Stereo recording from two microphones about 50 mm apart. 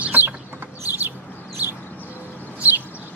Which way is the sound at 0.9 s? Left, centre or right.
Right.